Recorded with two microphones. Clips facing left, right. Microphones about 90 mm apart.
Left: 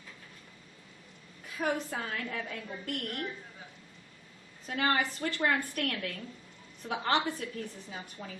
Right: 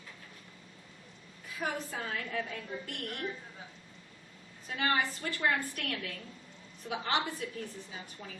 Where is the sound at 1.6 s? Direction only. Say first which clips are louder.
Left 4 dB; 45° left (ahead or behind).